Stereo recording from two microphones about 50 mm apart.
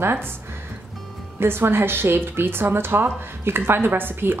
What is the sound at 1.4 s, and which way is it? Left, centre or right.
A woman's voice, right.